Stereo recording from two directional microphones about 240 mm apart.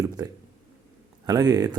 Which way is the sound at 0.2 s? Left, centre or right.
Centre.